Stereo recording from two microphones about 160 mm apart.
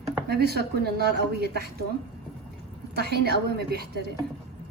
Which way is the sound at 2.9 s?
90° right.